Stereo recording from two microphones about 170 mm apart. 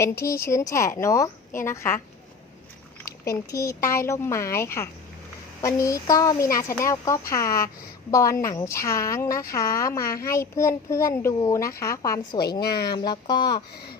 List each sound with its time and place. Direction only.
0.0 s a woman's voice: 15° left (ahead or behind)
3.2 s a woman's voice: 20° left (ahead or behind)